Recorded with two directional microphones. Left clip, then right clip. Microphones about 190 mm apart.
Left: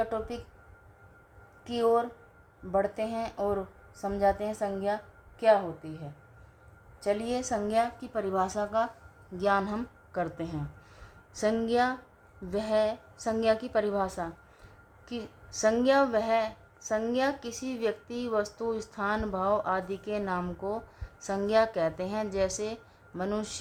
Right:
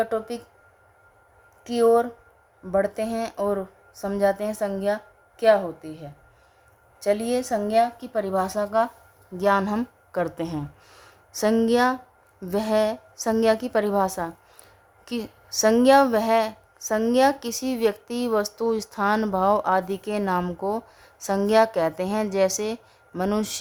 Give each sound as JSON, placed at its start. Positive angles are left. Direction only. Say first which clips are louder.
{"t": 0.0, "sound": "a woman's voice", "louder": "right 6 dB", "side_deg": -45}
{"t": 1.6, "sound": "a woman's voice", "louder": "right 7 dB", "side_deg": -45}
{"t": 7.0, "sound": "a woman's voice", "louder": "right 7 dB", "side_deg": -45}